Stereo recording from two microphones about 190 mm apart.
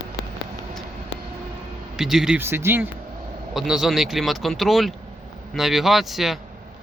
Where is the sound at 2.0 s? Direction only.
Centre (ahead or behind).